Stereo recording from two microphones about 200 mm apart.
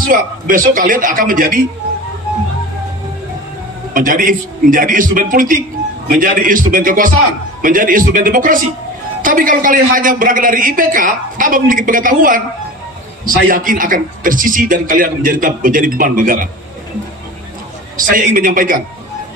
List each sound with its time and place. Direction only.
0.1 s a man's voice: 45° right (ahead or behind)
3.9 s a man's voice: 45° right (ahead or behind)
17.9 s a man's voice: 45° right (ahead or behind)